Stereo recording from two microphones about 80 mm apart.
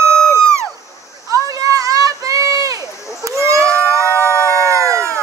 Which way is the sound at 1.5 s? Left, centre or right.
Right.